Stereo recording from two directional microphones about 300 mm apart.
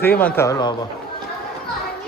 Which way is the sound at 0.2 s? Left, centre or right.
Centre.